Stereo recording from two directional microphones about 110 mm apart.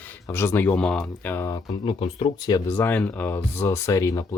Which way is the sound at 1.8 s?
55° left (ahead or behind).